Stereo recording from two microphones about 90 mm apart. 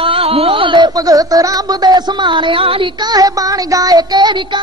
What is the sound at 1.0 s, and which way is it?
Speech, 45° right (ahead or behind).